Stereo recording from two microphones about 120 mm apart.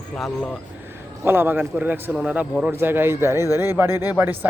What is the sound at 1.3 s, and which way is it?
A man's voice, 20° right (ahead or behind).